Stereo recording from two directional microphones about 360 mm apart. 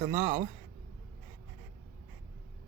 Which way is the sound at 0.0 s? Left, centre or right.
Centre.